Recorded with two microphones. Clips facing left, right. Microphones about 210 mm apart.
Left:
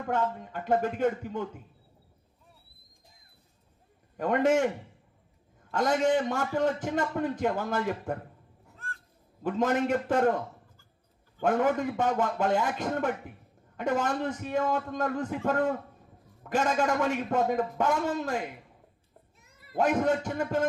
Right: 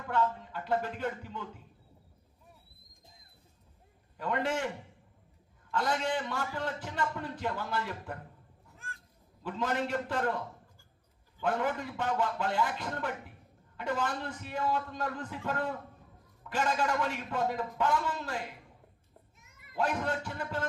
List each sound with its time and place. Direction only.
0.0 s a man's voice: 50° left (ahead or behind)
4.2 s a man's voice: 45° left (ahead or behind)
5.7 s a man's voice: 45° left (ahead or behind)
9.4 s a man's voice: 50° left (ahead or behind)
19.4 s cat: 35° left (ahead or behind)
19.9 s a man's voice: 45° left (ahead or behind)